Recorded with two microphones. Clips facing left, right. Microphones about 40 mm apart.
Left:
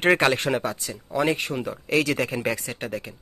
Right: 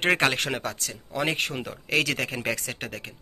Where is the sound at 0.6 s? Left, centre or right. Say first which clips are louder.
Left 3 dB; left.